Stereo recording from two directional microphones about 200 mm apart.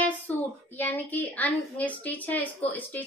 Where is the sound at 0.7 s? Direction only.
10° left (ahead or behind).